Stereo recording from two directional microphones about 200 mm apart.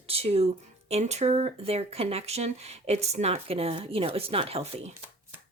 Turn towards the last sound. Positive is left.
turn(degrees=-30)  # may be behind; listen again after turning